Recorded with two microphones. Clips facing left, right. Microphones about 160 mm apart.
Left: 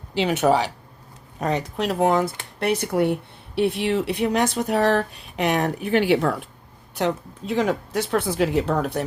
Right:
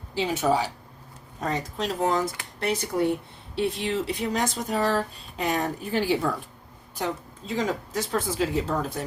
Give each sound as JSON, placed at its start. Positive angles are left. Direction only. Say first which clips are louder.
{"t": 0.1, "sound": "speech", "louder": "left 5 dB", "side_deg": 70}